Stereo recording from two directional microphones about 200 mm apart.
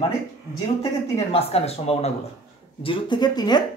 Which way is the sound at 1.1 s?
30° left (ahead or behind).